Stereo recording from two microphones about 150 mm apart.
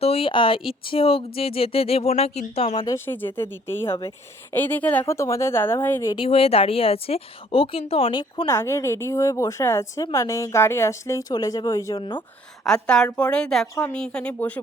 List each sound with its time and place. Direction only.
0.0 s speech: 40° left (ahead or behind)
2.8 s speech: 15° left (ahead or behind)
6.1 s speech: 40° left (ahead or behind)
8.4 s a woman's voice: 20° left (ahead or behind)
11.9 s speech: 30° left (ahead or behind)
12.6 s a woman's voice: 5° left (ahead or behind)